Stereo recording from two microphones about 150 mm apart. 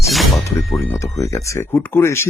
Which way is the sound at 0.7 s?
20° left (ahead or behind).